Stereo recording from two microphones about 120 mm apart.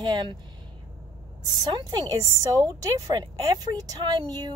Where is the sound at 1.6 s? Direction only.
35° right (ahead or behind).